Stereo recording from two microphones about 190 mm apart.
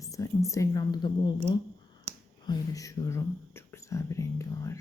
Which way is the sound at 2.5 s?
20° left (ahead or behind).